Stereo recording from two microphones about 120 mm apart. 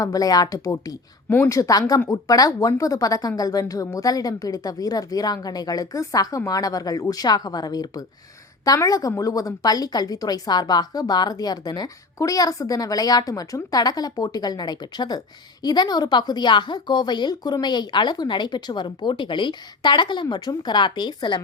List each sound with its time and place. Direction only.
0.0 s a woman's voice: 30° left (ahead or behind)